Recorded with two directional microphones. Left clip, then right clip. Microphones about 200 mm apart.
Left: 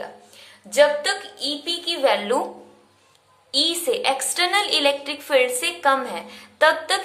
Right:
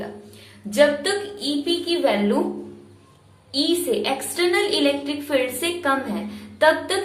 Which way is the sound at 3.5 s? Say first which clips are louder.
Left 1 dB; 35° left (ahead or behind).